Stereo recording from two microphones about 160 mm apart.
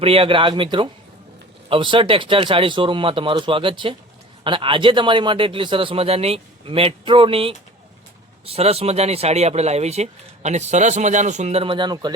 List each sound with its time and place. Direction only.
0.0 s speech: 35° right (ahead or behind)